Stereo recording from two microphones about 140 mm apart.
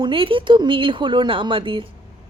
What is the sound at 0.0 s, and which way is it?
A woman's voice, 40° right (ahead or behind).